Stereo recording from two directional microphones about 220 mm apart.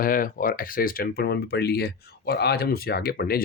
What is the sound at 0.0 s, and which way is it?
Speech, 40° left (ahead or behind).